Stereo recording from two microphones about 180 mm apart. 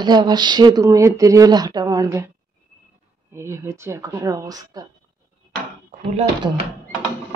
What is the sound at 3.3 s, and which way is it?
Speech, 15° right (ahead or behind).